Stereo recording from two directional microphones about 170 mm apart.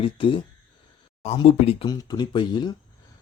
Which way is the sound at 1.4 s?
35° left (ahead or behind).